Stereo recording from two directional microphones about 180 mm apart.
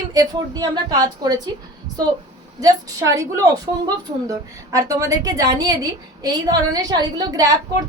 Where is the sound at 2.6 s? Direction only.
20° right (ahead or behind).